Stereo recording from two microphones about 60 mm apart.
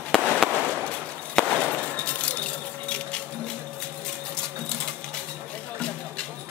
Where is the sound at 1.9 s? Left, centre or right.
Left.